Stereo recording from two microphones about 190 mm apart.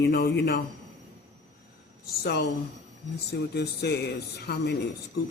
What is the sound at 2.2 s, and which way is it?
Speech, 55° left (ahead or behind).